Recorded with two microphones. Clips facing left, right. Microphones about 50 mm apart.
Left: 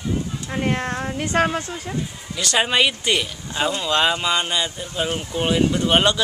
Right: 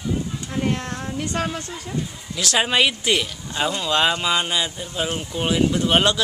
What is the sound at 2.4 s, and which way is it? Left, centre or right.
Speech, centre.